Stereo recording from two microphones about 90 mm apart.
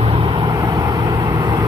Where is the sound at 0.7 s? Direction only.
45° right (ahead or behind).